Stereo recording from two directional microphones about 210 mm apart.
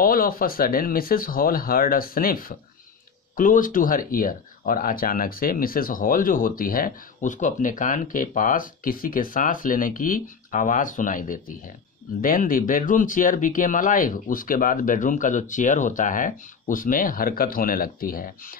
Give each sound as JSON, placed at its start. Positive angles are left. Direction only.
{"t": 0.0, "sound": "speech", "side_deg": 45}